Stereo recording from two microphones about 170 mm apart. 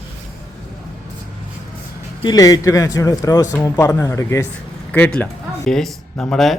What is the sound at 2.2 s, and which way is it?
Speech, 20° left (ahead or behind).